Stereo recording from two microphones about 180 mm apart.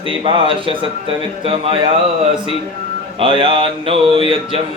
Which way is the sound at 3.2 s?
30° right (ahead or behind).